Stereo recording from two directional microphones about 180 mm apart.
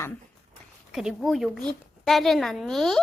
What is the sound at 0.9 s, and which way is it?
A woman's voice, centre (ahead or behind).